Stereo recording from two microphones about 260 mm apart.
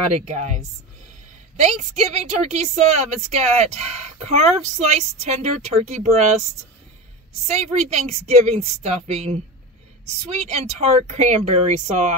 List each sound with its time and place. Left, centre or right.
0.3 s a woman's voice: right
7.4 s a woman's voice: right